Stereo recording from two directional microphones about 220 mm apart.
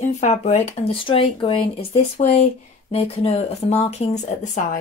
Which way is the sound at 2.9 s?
30° left (ahead or behind).